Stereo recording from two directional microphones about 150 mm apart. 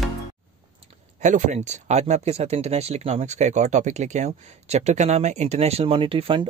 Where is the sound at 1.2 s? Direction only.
55° right (ahead or behind); by 6.4 s 35° right (ahead or behind).